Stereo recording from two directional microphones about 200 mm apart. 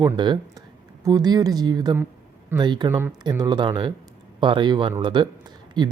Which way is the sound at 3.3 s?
20° right (ahead or behind).